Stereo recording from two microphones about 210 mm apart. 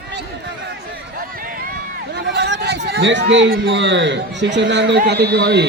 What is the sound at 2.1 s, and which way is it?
A man's voice, 55° right (ahead or behind).